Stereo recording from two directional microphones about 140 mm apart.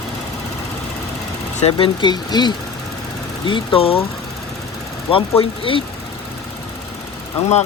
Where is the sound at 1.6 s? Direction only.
45° left (ahead or behind).